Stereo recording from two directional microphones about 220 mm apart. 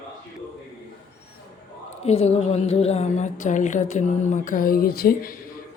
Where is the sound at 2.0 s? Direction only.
30° left (ahead or behind).